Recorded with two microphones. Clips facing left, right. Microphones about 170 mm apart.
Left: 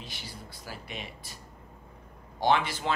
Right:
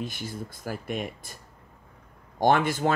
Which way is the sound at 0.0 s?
50° right (ahead or behind).